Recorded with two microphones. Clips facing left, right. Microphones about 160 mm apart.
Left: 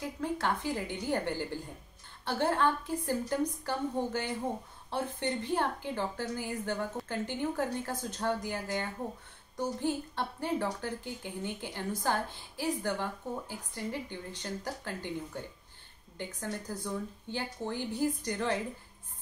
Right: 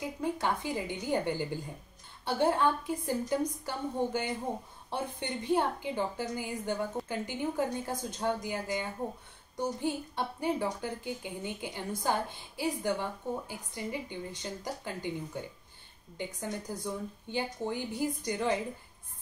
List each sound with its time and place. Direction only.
0.0 s a woman's voice: 15° right (ahead or behind)